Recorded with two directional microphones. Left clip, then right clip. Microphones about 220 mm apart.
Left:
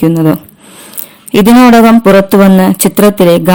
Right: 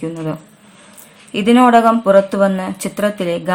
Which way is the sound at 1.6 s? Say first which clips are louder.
Left 4 dB; 45° left (ahead or behind).